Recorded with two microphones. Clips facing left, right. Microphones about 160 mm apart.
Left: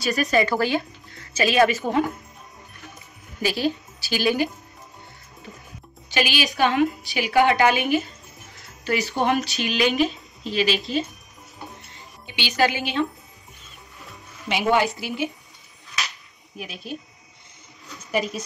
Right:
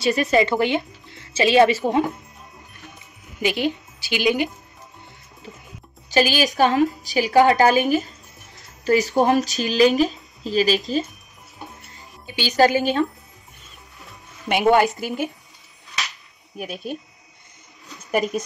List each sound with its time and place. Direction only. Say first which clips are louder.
0.0 s speech: right 3 dB; 25° right (ahead or behind)
3.3 s a woman's voice: right 1 dB; 20° right (ahead or behind)
6.0 s a woman's voice: right 5 dB; 40° right (ahead or behind)
12.4 s a woman's voice: right 5 dB; 40° right (ahead or behind)
14.5 s a woman's voice: right 4 dB; 50° right (ahead or behind)
16.5 s a woman's voice: right 6 dB; 50° right (ahead or behind)
18.1 s a woman's voice: right 4 dB; 45° right (ahead or behind)